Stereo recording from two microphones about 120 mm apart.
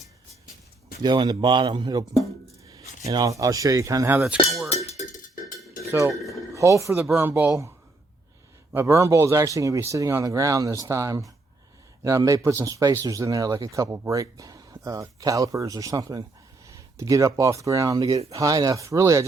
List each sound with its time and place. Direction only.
1.0 s a man's voice: 40° right (ahead or behind)
4.4 s cowbell: centre (ahead or behind)
4.7 s cowbell: 60° left (ahead or behind)
5.9 s speech: 25° right (ahead or behind)
8.7 s speech: 20° right (ahead or behind)